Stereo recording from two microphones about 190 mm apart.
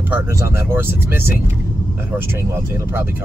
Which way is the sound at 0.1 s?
10° right (ahead or behind).